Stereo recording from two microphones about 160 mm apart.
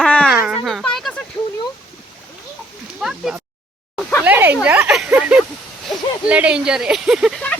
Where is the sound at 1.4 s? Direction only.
25° left (ahead or behind).